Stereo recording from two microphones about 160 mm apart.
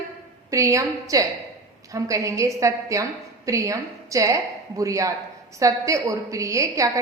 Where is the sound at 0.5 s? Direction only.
20° right (ahead or behind).